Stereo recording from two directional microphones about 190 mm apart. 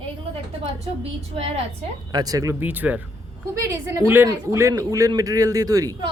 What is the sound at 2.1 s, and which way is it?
A man's voice, 20° right (ahead or behind).